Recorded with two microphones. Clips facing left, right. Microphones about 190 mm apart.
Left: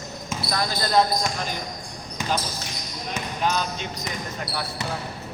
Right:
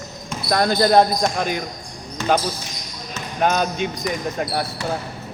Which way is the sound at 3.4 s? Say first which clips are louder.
Right 7 dB; 55° right (ahead or behind).